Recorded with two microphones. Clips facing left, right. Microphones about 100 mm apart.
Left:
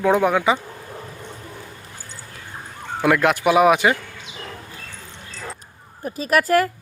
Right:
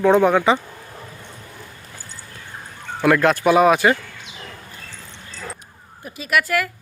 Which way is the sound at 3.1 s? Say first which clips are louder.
Right 1 dB; 15° left (ahead or behind).